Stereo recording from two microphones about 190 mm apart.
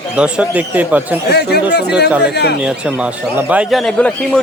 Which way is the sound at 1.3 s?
60° left (ahead or behind).